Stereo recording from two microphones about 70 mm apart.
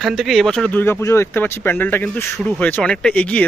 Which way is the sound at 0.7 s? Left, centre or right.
Left.